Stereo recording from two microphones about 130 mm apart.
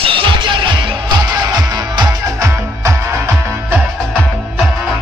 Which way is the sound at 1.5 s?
35° right (ahead or behind).